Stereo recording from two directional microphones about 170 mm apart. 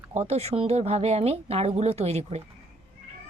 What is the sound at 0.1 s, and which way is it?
Speech, 40° right (ahead or behind).